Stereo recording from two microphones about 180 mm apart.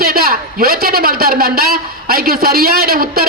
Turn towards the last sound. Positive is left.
turn(degrees=-55)  # may be behind; listen again after turning